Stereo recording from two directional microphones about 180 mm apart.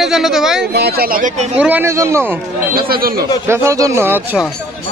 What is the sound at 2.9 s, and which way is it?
Speech, 55° right (ahead or behind).